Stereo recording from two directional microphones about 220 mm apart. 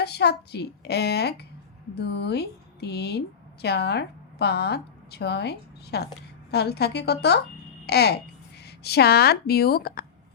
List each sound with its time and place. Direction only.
0.0 s a woman's voice: 50° left (ahead or behind)